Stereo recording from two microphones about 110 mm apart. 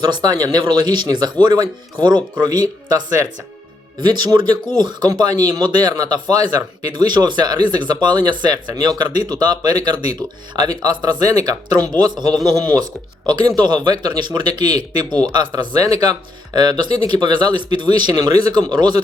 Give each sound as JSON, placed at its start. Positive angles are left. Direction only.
{"t": 0.0, "sound": "speech", "side_deg": -35}
{"t": 4.0, "sound": "speech", "side_deg": -40}